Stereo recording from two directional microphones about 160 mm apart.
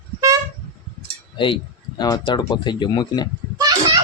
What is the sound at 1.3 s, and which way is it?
Speech, 30° left (ahead or behind).